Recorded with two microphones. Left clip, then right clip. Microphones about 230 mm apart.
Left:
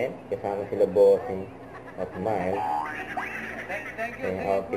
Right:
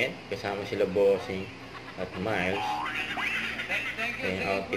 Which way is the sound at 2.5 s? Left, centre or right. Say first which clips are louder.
Left 2 dB; centre.